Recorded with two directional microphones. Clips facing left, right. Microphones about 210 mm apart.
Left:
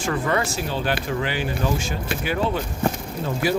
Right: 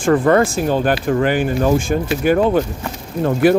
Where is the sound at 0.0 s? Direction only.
50° right (ahead or behind).